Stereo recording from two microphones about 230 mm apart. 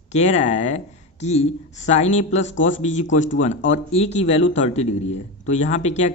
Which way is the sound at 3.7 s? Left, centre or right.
Left.